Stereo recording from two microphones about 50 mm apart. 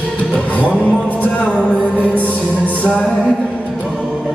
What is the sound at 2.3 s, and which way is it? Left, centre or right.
Music, right.